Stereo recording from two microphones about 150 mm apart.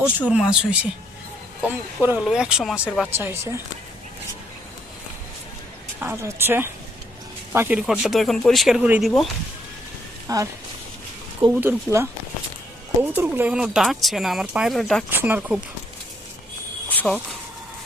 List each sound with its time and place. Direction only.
0.3 s speech: 5° right (ahead or behind)
6.0 s speech: 15° right (ahead or behind)
10.2 s speech: 20° right (ahead or behind)
11.6 s speech: 20° right (ahead or behind); by 15.0 s centre (ahead or behind)
15.1 s speech: 15° right (ahead or behind)
16.9 s speech: 10° left (ahead or behind)